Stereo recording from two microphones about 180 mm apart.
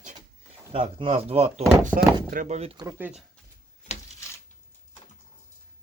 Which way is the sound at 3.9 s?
40° left (ahead or behind).